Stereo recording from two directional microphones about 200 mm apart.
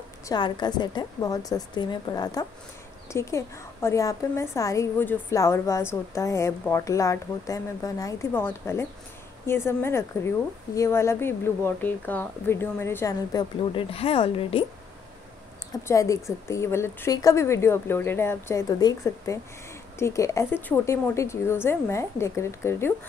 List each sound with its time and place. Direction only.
0.3 s a woman's voice: 20° left (ahead or behind)
15.9 s a woman's voice: 15° left (ahead or behind)